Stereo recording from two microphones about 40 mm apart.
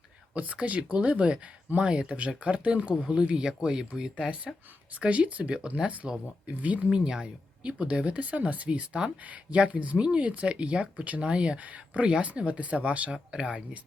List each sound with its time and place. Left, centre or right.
0.3 s speech: right; by 4.4 s centre
4.9 s speech: right
6.9 s speech: right
7.6 s speech: right
11.6 s speech: right